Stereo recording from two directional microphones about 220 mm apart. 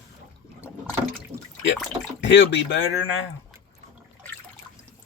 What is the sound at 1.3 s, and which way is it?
Water, 30° right (ahead or behind).